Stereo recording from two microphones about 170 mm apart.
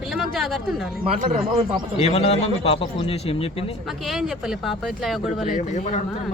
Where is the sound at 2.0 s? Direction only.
35° left (ahead or behind).